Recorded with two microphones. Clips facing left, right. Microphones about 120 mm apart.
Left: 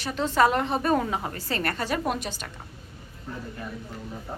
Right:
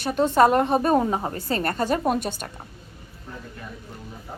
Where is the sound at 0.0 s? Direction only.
55° right (ahead or behind).